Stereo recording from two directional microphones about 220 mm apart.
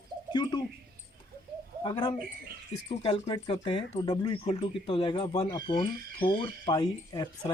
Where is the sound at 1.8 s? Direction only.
20° left (ahead or behind).